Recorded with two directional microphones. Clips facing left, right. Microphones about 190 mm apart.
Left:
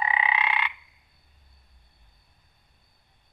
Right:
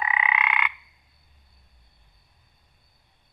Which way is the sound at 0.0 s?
30° left (ahead or behind).